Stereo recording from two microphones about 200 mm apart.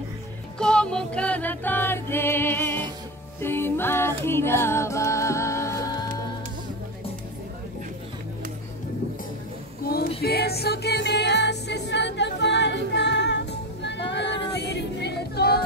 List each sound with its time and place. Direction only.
0.6 s music: 5° left (ahead or behind)
9.8 s music: 50° left (ahead or behind)